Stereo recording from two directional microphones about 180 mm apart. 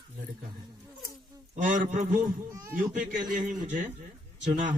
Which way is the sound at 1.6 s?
45° right (ahead or behind).